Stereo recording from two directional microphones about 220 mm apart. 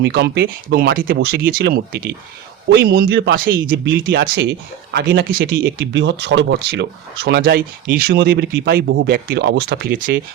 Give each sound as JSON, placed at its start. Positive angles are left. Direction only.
{"t": 0.0, "sound": "speech", "side_deg": -50}